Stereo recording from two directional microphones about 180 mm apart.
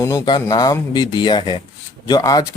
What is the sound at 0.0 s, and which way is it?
Speech, 15° left (ahead or behind).